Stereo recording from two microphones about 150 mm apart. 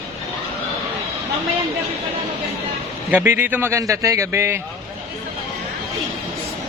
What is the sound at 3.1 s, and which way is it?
A man's voice, 15° right (ahead or behind).